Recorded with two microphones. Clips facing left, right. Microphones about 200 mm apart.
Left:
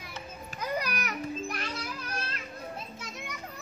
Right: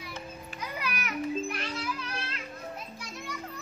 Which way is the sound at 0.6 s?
40° left (ahead or behind).